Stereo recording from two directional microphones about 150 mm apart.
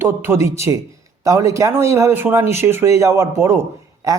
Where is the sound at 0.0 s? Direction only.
15° right (ahead or behind).